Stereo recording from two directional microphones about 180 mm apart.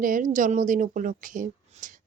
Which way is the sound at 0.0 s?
50° right (ahead or behind).